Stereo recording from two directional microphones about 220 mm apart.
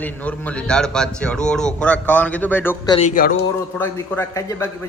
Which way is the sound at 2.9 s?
35° left (ahead or behind).